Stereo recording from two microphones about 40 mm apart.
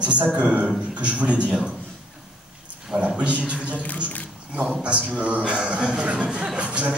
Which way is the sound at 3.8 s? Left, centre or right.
Left.